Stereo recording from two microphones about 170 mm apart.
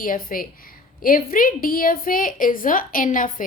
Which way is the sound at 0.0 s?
55° left (ahead or behind).